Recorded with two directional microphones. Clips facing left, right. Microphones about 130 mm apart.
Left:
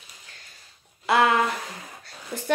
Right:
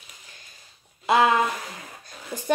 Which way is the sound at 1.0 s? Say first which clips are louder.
Right 1 dB; 20° right (ahead or behind).